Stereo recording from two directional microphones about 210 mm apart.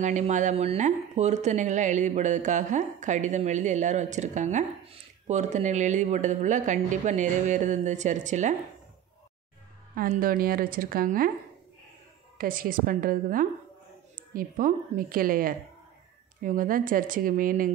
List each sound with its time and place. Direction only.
0.0 s speech: 35° right (ahead or behind)
9.9 s a woman's voice: 45° right (ahead or behind)
12.4 s a woman's voice: 40° right (ahead or behind)